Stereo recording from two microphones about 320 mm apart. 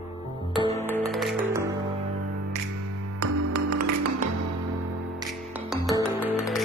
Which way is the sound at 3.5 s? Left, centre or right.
Right.